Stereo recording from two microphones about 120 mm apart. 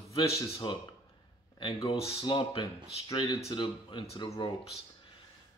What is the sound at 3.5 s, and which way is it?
Speech, 40° left (ahead or behind).